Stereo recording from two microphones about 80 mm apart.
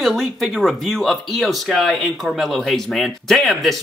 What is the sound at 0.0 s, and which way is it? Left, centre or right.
Speech, centre.